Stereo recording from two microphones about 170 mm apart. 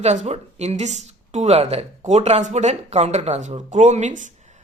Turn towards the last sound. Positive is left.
turn(degrees=-45)  # may be behind; listen again after turning